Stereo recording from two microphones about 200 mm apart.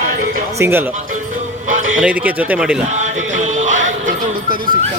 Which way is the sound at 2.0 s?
5° right (ahead or behind).